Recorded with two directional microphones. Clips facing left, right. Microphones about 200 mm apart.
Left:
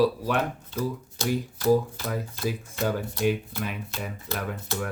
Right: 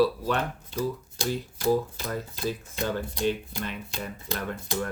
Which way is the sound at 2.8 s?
15° right (ahead or behind).